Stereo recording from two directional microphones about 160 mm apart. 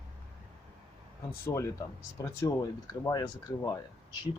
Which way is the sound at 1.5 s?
15° left (ahead or behind).